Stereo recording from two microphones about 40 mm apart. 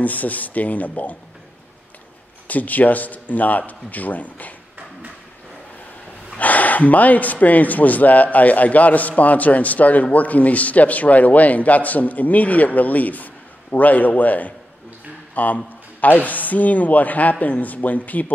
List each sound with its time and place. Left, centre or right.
0.0 s speech: left
2.4 s speech: left
6.3 s a man's voice: left